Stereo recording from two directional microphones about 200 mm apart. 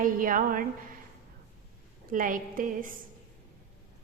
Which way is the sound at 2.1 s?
40° right (ahead or behind).